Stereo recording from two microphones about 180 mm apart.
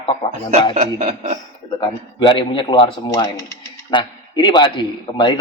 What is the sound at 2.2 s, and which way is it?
Speech, 30° left (ahead or behind).